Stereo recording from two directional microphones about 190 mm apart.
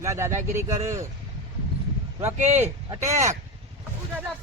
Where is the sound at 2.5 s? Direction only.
35° right (ahead or behind).